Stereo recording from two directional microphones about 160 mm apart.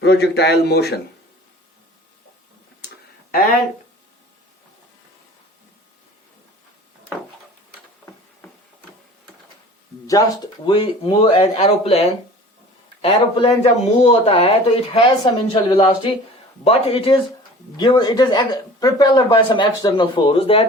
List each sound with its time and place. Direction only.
0.0 s a man's voice: 90° left
10.1 s speech: 20° left (ahead or behind)
17.7 s speech: 25° left (ahead or behind)